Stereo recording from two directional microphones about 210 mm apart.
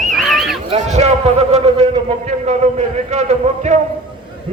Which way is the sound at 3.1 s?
30° right (ahead or behind).